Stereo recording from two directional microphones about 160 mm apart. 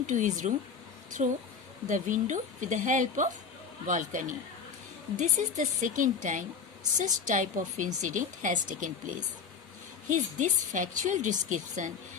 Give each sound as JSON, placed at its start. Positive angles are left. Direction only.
{"t": 0.1, "sound": "a woman's voice", "side_deg": -50}